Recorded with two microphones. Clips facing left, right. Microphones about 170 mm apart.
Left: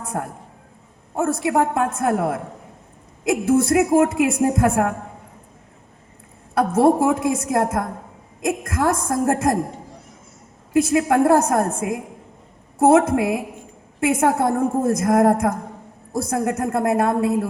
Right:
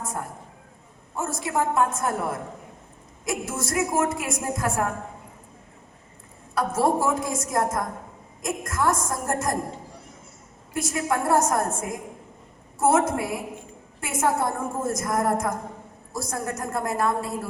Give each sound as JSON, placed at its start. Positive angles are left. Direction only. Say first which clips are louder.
{"t": 0.0, "sound": "a sound", "louder": "left 5 dB", "side_deg": 60}
{"t": 1.1, "sound": "a woman's voice", "louder": "left 7 dB", "side_deg": 60}
{"t": 6.5, "sound": "a woman's voice", "louder": "left 7 dB", "side_deg": 60}
{"t": 10.8, "sound": "a woman's voice", "louder": "left 10 dB", "side_deg": 60}